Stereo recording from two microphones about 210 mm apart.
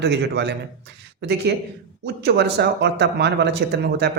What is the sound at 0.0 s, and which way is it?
Speech, 55° right (ahead or behind).